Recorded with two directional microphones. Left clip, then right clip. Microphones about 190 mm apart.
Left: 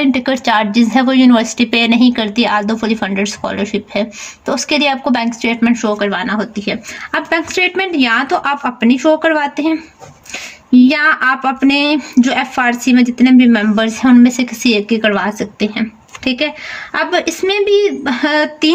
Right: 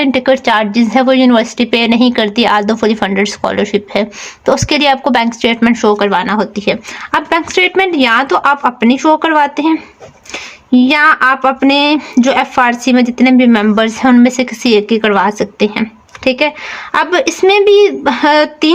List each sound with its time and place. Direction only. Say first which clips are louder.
0.0 s a woman's voice: right 4 dB; 35° right (ahead or behind)